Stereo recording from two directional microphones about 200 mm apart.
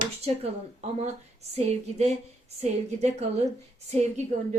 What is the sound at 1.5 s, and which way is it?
Speech, 35° right (ahead or behind).